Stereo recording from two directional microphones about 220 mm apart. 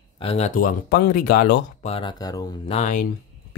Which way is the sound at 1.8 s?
25° left (ahead or behind).